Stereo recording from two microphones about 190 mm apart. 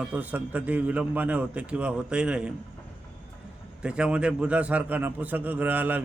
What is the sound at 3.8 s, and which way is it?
A man's voice, 5° right (ahead or behind).